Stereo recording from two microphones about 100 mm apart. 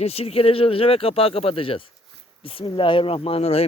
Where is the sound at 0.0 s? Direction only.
90° left.